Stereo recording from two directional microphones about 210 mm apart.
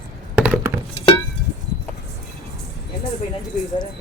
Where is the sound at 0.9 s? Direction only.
25° left (ahead or behind).